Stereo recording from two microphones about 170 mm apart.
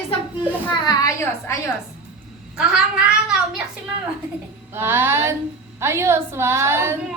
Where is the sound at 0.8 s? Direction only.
20° left (ahead or behind).